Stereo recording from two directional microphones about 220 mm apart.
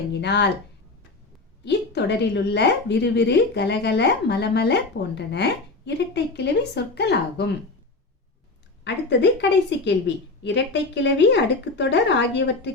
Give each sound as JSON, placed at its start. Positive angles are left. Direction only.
{"t": 0.1, "sound": "speech", "side_deg": 50}
{"t": 1.6, "sound": "a woman's voice", "side_deg": 50}
{"t": 8.8, "sound": "a woman's voice", "side_deg": 50}